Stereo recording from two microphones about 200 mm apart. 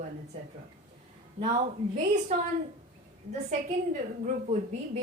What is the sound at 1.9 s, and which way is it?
Speech, 35° right (ahead or behind).